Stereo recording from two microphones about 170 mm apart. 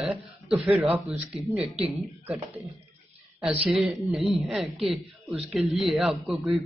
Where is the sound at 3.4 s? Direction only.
5° right (ahead or behind).